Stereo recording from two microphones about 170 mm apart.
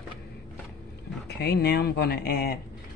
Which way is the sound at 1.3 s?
75° left (ahead or behind).